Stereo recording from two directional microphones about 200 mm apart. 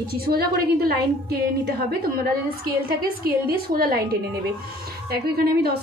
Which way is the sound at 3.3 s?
50° right (ahead or behind).